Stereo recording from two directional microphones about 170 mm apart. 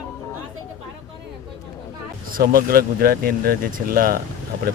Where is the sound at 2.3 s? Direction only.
60° right (ahead or behind).